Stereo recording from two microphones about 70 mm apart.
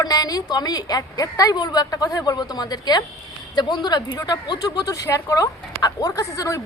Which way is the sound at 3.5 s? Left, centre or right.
Left.